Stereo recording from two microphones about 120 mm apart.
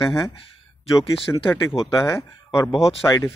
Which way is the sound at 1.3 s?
25° left (ahead or behind).